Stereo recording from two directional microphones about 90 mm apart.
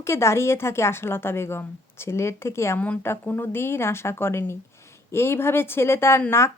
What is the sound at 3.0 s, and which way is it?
Speech, 25° left (ahead or behind).